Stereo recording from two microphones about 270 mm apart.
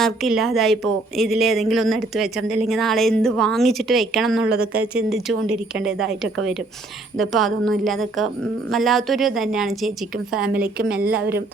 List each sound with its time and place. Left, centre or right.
0.0 s speech: centre
4.5 s speech: right
4.8 s speech: centre